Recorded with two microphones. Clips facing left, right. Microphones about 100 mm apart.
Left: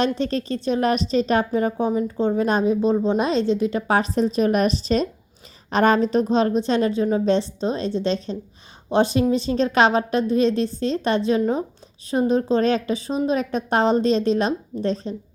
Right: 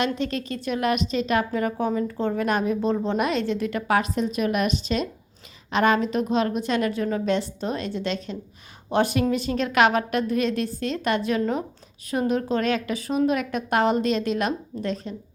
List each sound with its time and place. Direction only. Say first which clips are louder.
0.0 s a woman's voice: left 4 dB; 35° left (ahead or behind)